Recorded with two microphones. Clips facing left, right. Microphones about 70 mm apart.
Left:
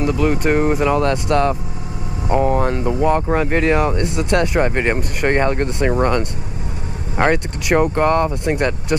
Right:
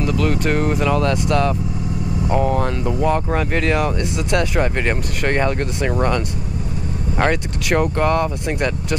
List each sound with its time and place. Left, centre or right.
0.0 s speech: centre
3.9 s speech: centre
4.6 s speech: centre
8.2 s speech: centre